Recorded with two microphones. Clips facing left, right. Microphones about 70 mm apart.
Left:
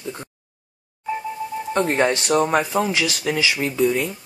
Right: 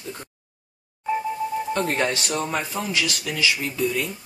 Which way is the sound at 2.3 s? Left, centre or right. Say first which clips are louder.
Left 8 dB; left.